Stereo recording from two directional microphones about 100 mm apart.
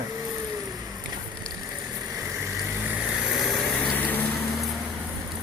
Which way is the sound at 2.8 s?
10° right (ahead or behind).